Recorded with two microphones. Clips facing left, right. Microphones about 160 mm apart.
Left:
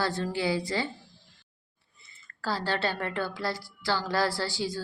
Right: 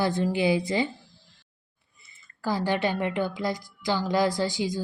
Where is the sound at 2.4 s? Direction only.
15° right (ahead or behind).